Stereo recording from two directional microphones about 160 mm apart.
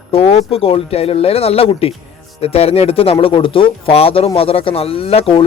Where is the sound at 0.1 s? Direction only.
35° left (ahead or behind).